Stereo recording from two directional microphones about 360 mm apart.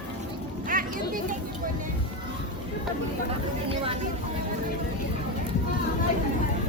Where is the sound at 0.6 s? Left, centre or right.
Right.